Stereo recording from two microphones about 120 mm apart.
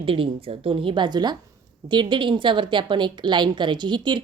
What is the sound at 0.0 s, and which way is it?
A woman's voice, 50° right (ahead or behind).